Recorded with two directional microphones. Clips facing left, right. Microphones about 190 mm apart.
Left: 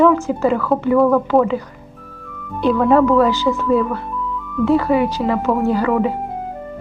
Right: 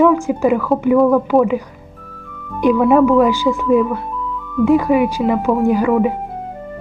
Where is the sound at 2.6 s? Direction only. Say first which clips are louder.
Right 2 dB; 15° right (ahead or behind).